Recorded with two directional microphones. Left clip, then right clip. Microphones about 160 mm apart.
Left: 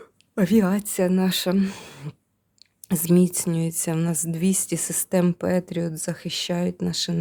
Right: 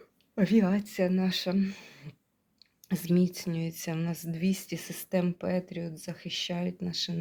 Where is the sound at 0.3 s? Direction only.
40° left (ahead or behind).